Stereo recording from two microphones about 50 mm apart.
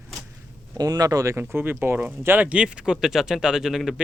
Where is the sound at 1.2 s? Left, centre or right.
Right.